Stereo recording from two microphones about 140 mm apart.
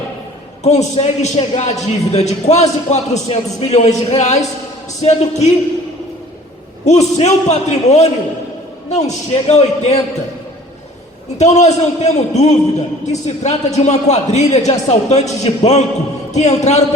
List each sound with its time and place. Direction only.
0.6 s a man's voice: 50° left (ahead or behind)
6.8 s a man's voice: 50° left (ahead or behind)
11.3 s a man's voice: 55° left (ahead or behind)